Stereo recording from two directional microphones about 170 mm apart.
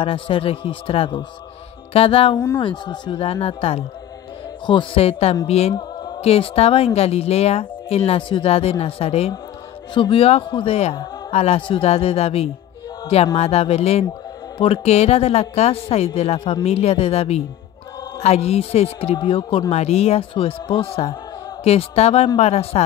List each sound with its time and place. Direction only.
0.0 s a woman's voice: 30° left (ahead or behind)
2.3 s speech: 15° left (ahead or behind)
2.6 s a woman's voice: 25° left (ahead or behind)